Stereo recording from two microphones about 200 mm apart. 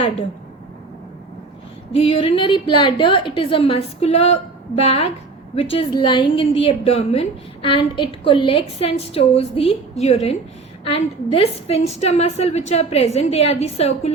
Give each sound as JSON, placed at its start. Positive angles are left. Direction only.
{"t": 2.0, "sound": "a woman's voice", "side_deg": 30}